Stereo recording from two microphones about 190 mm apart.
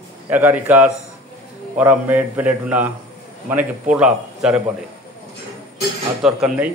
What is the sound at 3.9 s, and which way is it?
Speech, 5° right (ahead or behind).